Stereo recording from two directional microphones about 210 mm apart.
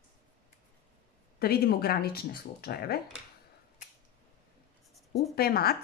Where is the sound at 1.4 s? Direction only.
45° left (ahead or behind).